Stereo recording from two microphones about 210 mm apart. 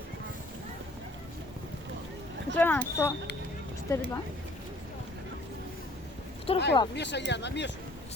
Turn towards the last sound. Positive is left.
turn(degrees=55)  # may be behind; listen again after turning